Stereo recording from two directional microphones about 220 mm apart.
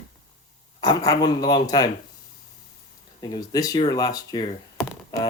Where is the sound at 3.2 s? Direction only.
15° left (ahead or behind).